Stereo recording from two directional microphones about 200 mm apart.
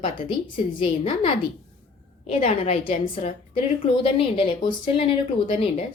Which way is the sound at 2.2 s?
35° left (ahead or behind).